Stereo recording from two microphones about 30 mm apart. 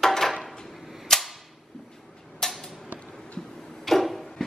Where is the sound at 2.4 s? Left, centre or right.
Centre.